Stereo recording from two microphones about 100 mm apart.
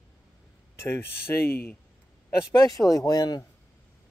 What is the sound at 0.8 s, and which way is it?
Speech, 25° left (ahead or behind).